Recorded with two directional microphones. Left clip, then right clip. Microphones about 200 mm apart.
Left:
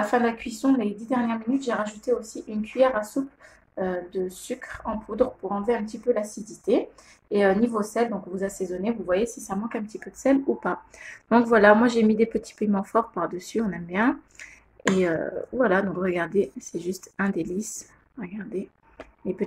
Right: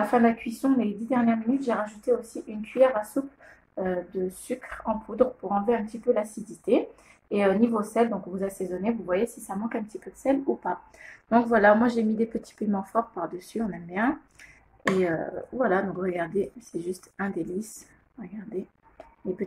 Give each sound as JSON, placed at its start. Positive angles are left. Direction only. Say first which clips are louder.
{"t": 0.1, "sound": "a woman's voice", "louder": "right 1 dB", "side_deg": 5}
{"t": 4.8, "sound": "a woman's voice", "louder": "even", "side_deg": 10}
{"t": 10.2, "sound": "a woman's voice", "louder": "left 3 dB", "side_deg": 25}